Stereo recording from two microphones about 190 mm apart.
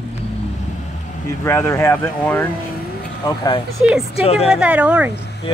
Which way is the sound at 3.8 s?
5° right (ahead or behind).